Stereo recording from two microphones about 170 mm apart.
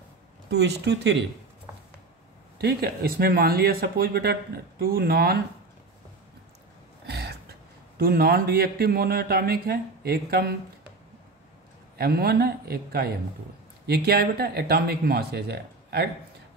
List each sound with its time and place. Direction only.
0.5 s speech: 85° right
2.6 s speech: 65° right (ahead or behind)
7.1 s throat clearing: 70° right (ahead or behind)
8.0 s speech: 65° right (ahead or behind)
12.0 s speech: 65° right (ahead or behind)